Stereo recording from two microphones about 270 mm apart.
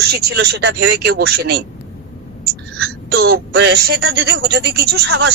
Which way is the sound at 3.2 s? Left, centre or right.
Right.